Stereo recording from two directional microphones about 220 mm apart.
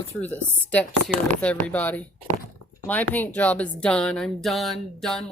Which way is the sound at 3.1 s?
5° left (ahead or behind).